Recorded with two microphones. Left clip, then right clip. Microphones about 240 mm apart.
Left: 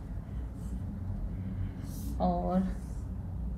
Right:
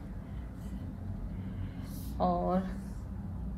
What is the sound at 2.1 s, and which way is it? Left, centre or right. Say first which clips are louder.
Speech: right 1 dB; right.